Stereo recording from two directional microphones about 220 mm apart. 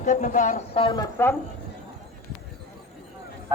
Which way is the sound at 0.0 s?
35° left (ahead or behind).